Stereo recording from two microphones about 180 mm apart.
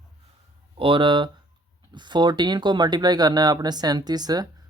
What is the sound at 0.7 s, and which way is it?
Speech, 25° right (ahead or behind).